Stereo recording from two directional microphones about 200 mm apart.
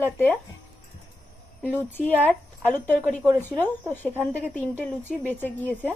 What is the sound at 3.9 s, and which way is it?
Speech, 10° left (ahead or behind).